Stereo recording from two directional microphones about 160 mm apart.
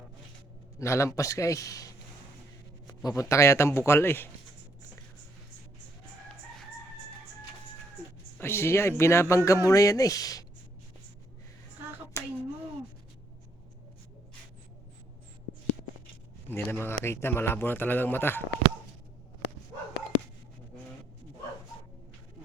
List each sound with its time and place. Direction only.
0.8 s a man's voice: 20° left (ahead or behind)
8.4 s speech: 15° left (ahead or behind)
12.1 s a sound: 15° left (ahead or behind)
16.5 s speech: 15° left (ahead or behind)